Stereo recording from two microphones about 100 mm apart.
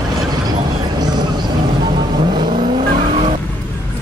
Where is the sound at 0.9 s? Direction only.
45° right (ahead or behind); by 3.3 s 60° right (ahead or behind).